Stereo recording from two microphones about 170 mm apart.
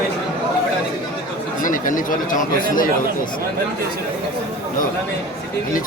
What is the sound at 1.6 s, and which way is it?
Speech, 50° left (ahead or behind).